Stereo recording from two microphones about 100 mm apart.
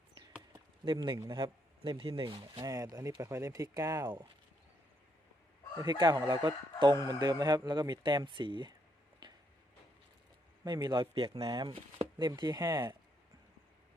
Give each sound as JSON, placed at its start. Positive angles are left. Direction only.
{"t": 0.9, "sound": "a man's voice", "side_deg": -55}
{"t": 2.2, "sound": "speech", "side_deg": -45}
{"t": 5.8, "sound": "speech", "side_deg": -45}
{"t": 9.2, "sound": "a sound", "side_deg": -50}
{"t": 10.6, "sound": "speech", "side_deg": -45}
{"t": 12.4, "sound": "speech", "side_deg": -40}